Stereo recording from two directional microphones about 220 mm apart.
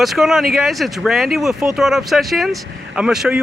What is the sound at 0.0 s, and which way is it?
Speech, centre (ahead or behind).